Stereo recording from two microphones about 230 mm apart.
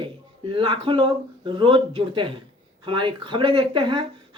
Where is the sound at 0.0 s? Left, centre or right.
Right.